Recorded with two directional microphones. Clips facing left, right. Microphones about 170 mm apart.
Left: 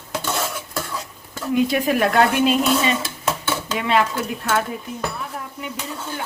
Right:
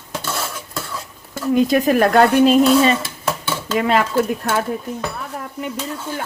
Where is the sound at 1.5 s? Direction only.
45° right (ahead or behind).